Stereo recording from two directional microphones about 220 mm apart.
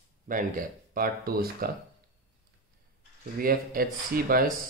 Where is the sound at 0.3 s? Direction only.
40° right (ahead or behind).